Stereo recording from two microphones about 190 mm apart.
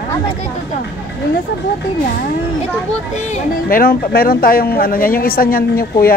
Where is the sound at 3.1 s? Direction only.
40° left (ahead or behind).